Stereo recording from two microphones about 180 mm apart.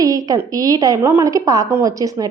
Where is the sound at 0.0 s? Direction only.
20° right (ahead or behind).